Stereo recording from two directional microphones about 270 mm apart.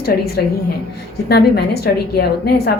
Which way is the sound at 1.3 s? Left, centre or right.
Left.